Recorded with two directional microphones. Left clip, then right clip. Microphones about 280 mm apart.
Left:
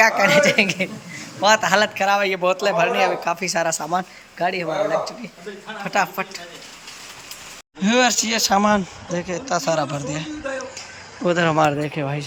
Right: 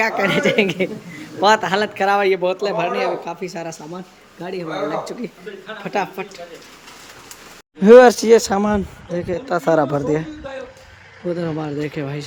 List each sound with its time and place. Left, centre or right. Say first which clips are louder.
0.0 s speech: left 3 dB; centre
5.8 s speech: left 2 dB; centre
7.8 s speech: right 10 dB; centre
11.3 s speech: left 6 dB; left
11.6 s speech: left 5 dB; centre